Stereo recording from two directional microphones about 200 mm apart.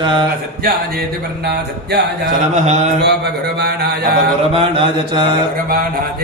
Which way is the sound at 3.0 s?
55° right (ahead or behind).